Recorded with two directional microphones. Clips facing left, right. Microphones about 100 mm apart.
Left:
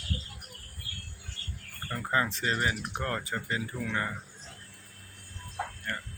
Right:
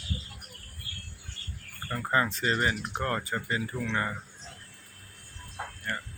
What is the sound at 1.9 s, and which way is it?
Speech, 5° right (ahead or behind).